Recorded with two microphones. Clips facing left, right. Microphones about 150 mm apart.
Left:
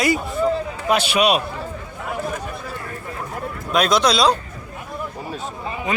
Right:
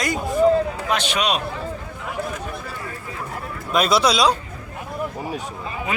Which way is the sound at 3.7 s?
5° right (ahead or behind).